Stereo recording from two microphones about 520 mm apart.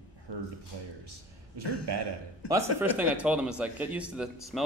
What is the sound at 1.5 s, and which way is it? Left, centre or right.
Speech, right.